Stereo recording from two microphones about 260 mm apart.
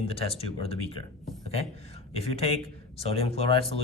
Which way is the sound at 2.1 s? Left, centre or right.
Left.